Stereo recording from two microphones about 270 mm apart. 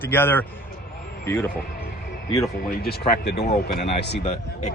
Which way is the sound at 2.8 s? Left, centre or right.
Left.